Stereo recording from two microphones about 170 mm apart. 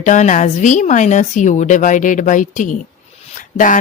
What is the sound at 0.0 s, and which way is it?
Speech, 50° left (ahead or behind).